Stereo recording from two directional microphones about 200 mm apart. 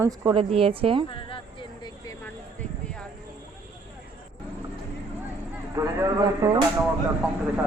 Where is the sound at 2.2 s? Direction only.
5° left (ahead or behind).